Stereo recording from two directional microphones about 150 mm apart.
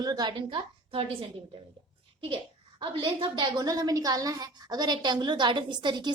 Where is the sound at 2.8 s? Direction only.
35° right (ahead or behind).